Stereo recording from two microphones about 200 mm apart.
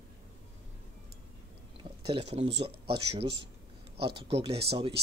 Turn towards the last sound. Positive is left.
turn(degrees=-30)  # may be behind; listen again after turning